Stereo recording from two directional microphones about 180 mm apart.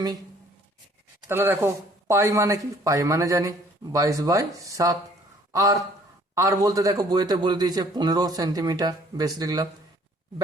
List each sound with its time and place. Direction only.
1.3 s a man's voice: 15° right (ahead or behind)